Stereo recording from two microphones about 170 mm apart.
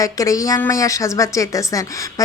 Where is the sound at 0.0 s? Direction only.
20° left (ahead or behind).